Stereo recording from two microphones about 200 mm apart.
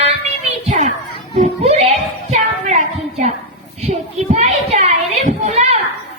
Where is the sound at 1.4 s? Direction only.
35° right (ahead or behind).